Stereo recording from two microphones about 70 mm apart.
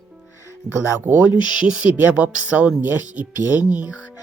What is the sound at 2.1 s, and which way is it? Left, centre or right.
Speech, centre.